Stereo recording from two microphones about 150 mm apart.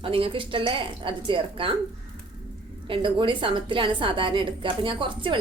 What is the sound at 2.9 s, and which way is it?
A woman's voice, 35° right (ahead or behind).